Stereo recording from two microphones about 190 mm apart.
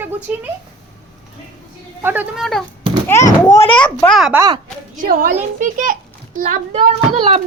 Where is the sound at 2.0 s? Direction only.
10° right (ahead or behind).